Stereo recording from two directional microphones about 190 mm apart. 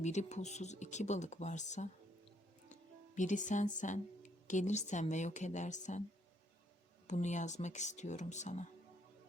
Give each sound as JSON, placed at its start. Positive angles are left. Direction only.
{"t": 0.0, "sound": "speech", "side_deg": 35}
{"t": 3.2, "sound": "speech", "side_deg": 40}
{"t": 7.1, "sound": "speech", "side_deg": 40}